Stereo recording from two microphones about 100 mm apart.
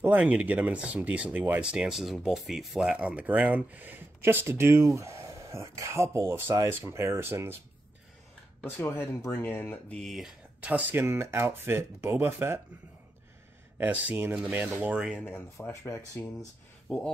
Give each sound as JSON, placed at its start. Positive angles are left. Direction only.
{"t": 0.0, "sound": "speech", "side_deg": -15}
{"t": 8.6, "sound": "speech", "side_deg": 20}
{"t": 9.9, "sound": "speech", "side_deg": 0}
{"t": 10.6, "sound": "speech", "side_deg": -15}
{"t": 13.7, "sound": "speech", "side_deg": -20}
{"t": 15.1, "sound": "speech", "side_deg": 20}